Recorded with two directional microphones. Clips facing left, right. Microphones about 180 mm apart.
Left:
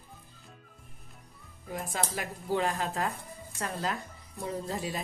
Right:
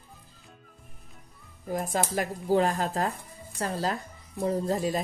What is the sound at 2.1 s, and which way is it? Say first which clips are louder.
Speech: right 8 dB; 40° right (ahead or behind).